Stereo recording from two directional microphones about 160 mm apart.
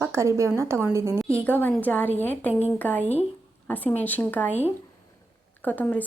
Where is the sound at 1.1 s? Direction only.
10° left (ahead or behind).